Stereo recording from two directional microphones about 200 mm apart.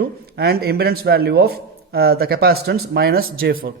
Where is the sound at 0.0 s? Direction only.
55° right (ahead or behind).